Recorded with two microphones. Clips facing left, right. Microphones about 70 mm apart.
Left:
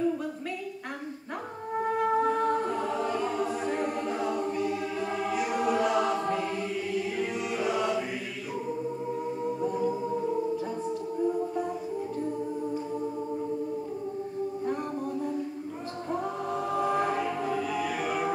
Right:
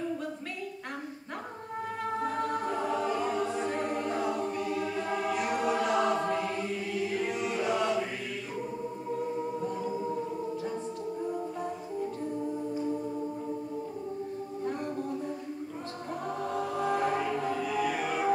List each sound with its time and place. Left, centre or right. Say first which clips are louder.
2.2 s choir: left 5 dB; centre
16.4 s choir: left 1 dB; centre